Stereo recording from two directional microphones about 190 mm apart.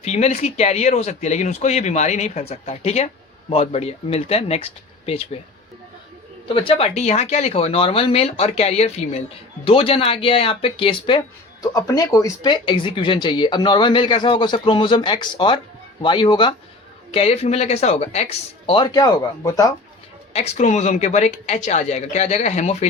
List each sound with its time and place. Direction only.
0.0 s speech: 35° left (ahead or behind)
6.5 s speech: 30° left (ahead or behind)
20.3 s speech: 35° left (ahead or behind)